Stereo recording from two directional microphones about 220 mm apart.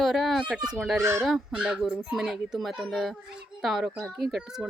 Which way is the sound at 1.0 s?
10° right (ahead or behind).